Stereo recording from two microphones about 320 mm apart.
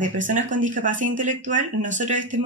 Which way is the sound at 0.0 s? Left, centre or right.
Right.